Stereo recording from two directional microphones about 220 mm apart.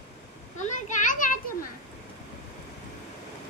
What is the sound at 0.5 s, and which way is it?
Children playing, 35° left (ahead or behind).